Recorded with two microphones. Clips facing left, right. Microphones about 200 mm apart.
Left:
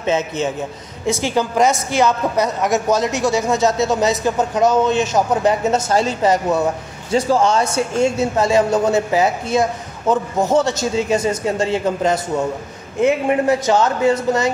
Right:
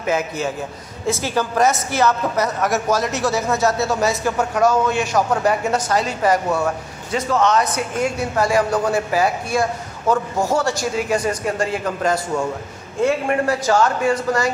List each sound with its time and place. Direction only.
0.0 s a woman's voice: 25° left (ahead or behind)
7.2 s a woman's voice: 30° left (ahead or behind)